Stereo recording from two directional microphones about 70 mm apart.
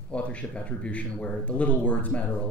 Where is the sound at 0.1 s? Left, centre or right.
Centre.